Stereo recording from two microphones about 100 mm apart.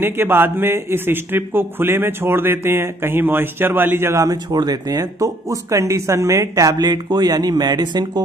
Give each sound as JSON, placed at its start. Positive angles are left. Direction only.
{"t": 0.0, "sound": "a man's voice", "side_deg": -20}
{"t": 4.5, "sound": "speech", "side_deg": -45}